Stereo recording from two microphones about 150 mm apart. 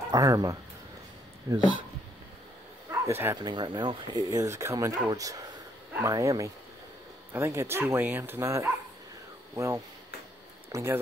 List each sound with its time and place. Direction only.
0.1 s speech: 20° right (ahead or behind)
2.9 s bow-wow: 15° right (ahead or behind)
3.3 s speech: 30° right (ahead or behind)
10.7 s speech: 15° right (ahead or behind)